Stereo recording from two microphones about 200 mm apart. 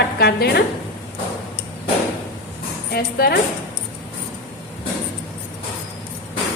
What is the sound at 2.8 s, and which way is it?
Speech, 55° left (ahead or behind).